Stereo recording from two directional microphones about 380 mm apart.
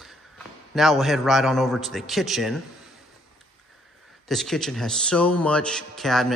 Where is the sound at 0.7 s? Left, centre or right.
Centre.